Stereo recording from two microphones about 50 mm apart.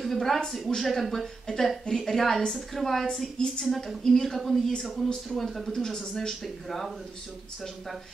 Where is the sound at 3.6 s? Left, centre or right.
Centre.